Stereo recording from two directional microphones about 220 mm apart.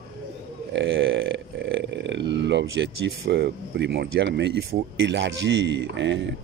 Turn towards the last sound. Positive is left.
turn(degrees=-55)  # may be behind; listen again after turning